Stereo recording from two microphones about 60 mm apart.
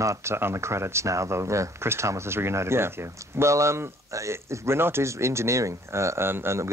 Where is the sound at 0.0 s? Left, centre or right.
Right.